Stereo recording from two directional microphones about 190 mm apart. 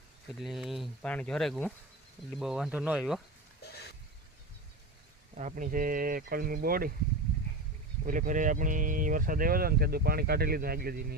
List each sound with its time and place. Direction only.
0.3 s speech: centre (ahead or behind)
3.6 s a sound: 60° left (ahead or behind)
5.4 s speech: 40° right (ahead or behind)
8.0 s speech: 45° right (ahead or behind)